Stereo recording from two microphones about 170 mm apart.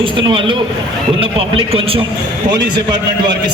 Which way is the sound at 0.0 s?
30° right (ahead or behind).